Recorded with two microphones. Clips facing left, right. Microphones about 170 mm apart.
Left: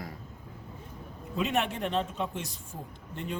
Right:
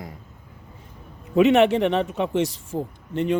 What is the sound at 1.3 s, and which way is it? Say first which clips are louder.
A man's voice: right 14 dB; 85° right.